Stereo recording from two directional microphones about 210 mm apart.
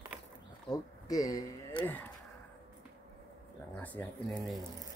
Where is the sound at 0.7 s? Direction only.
15° left (ahead or behind).